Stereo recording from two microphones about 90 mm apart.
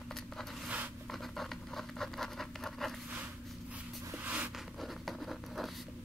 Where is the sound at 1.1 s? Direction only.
Centre (ahead or behind).